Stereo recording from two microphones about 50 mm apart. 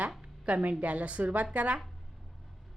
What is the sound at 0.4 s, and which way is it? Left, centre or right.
A woman's voice, right.